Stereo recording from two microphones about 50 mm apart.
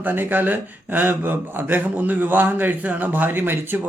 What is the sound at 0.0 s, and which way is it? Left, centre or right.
Speech, right.